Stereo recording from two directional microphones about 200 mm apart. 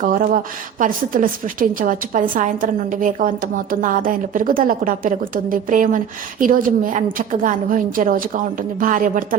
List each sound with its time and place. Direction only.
0.0 s a woman's voice: 45° right (ahead or behind)